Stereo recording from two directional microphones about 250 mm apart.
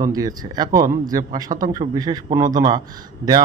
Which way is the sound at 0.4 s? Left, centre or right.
Centre.